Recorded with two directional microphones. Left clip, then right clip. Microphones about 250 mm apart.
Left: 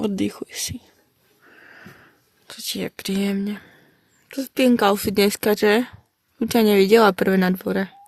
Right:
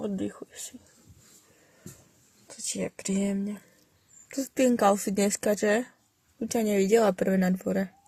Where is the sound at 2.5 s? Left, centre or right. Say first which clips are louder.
Left 5 dB; left.